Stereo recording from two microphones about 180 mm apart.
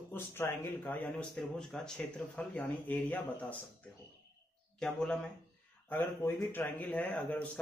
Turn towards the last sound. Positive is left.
turn(degrees=10)  # may be behind; listen again after turning